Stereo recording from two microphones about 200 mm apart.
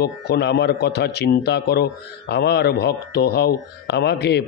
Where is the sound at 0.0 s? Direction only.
55° left (ahead or behind).